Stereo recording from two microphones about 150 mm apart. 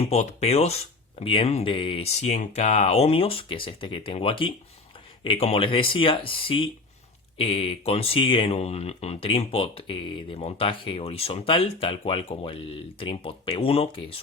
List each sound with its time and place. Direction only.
0.0 s speech: 45° left (ahead or behind)